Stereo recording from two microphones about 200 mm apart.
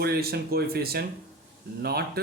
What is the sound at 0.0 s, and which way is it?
Speech, 50° right (ahead or behind).